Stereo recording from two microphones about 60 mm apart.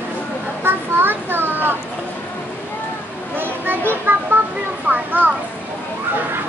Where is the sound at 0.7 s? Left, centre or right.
Right.